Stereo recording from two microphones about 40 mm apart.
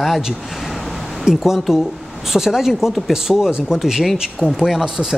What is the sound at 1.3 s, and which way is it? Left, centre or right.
Speech, centre.